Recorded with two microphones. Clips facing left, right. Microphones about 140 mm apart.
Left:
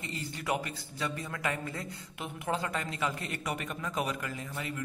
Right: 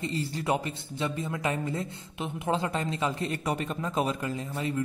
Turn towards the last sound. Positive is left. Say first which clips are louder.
# right 7 dB
turn(degrees=-30)  # may be behind; listen again after turning